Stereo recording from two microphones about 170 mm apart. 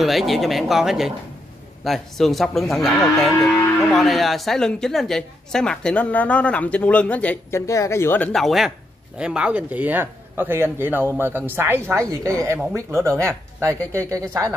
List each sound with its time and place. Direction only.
0.0 s a woman's voice: centre (ahead or behind)
3.3 s speech: 15° left (ahead or behind)
3.9 s a woman's voice: centre (ahead or behind); by 14.5 s 20° right (ahead or behind)